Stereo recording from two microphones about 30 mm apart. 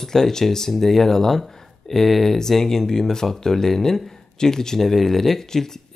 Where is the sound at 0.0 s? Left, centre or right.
Centre.